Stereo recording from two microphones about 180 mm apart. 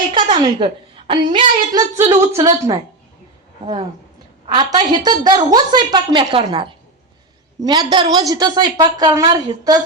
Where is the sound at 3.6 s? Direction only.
30° right (ahead or behind).